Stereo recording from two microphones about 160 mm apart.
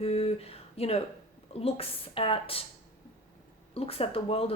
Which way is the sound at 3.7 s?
35° left (ahead or behind).